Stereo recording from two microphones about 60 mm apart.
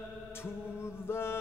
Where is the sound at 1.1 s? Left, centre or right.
Left.